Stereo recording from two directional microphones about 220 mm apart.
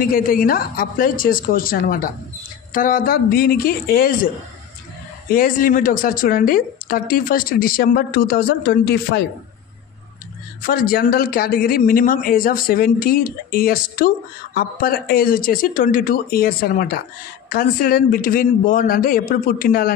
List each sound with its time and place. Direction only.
0.0 s speech: 40° left (ahead or behind)
5.3 s speech: 40° left (ahead or behind)
10.6 s speech: 40° left (ahead or behind)